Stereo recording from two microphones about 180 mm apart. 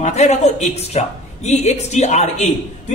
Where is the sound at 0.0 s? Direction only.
40° left (ahead or behind).